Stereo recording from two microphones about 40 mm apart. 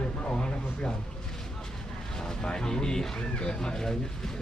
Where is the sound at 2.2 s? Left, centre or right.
Centre.